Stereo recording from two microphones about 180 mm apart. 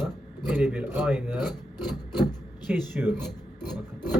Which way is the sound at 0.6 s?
10° right (ahead or behind).